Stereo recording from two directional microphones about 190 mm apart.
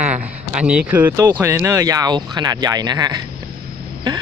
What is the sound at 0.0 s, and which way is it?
Speech, 5° right (ahead or behind).